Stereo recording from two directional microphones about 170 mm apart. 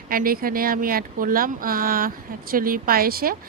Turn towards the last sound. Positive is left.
turn(degrees=-60)  # may be behind; listen again after turning